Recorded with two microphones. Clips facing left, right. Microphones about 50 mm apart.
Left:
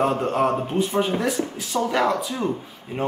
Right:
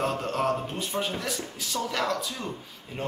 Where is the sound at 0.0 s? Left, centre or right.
Centre.